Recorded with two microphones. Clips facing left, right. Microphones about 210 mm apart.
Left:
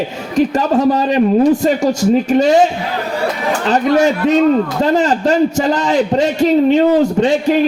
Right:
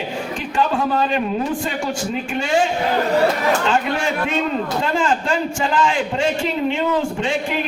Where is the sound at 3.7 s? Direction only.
40° left (ahead or behind).